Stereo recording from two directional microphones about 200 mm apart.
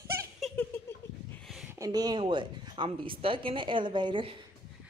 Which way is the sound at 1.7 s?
20° right (ahead or behind).